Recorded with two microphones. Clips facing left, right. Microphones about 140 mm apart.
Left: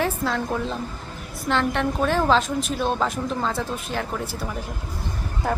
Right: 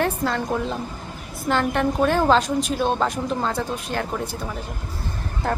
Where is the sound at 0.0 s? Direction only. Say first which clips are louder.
Right 1 dB; centre (ahead or behind).